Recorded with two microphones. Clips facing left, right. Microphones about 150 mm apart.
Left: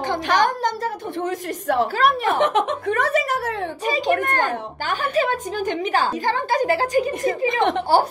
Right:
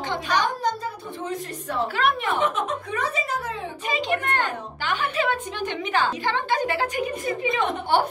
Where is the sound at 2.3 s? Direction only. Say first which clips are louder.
Left 5 dB; 90° left.